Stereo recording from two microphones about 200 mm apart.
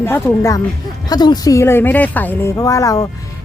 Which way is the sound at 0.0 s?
10° left (ahead or behind).